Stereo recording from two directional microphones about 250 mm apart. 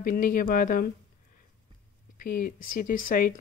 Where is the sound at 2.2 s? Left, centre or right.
Left.